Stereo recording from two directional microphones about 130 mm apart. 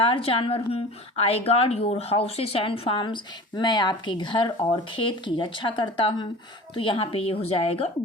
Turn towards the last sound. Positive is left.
turn(degrees=45)  # may be behind; listen again after turning